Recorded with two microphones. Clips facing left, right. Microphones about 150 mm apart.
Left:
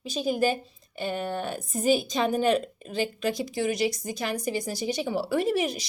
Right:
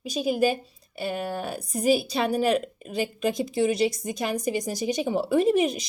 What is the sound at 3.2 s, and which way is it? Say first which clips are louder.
A woman's voice: right 6 dB; 25° right (ahead or behind).